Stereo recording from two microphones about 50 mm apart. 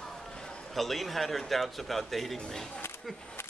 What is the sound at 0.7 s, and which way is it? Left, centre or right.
Speech, centre.